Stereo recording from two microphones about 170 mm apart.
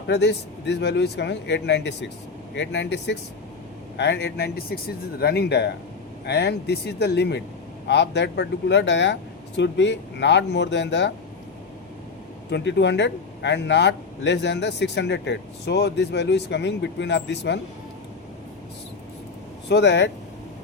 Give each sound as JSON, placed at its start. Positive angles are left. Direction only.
{"t": 0.1, "sound": "a man's voice", "side_deg": 85}
{"t": 7.9, "sound": "a man's voice", "side_deg": 90}
{"t": 12.5, "sound": "a man's voice", "side_deg": 85}
{"t": 19.6, "sound": "a man's voice", "side_deg": 90}